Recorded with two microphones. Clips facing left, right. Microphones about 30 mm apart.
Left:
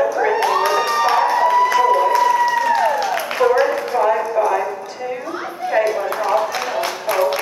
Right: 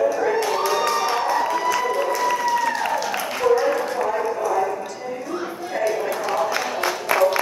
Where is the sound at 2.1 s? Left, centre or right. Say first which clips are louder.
Left 6 dB; left.